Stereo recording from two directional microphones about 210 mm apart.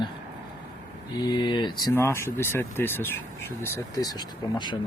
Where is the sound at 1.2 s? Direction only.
20° left (ahead or behind).